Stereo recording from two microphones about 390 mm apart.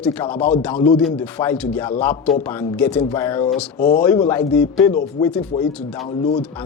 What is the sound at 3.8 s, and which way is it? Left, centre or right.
Speech, left.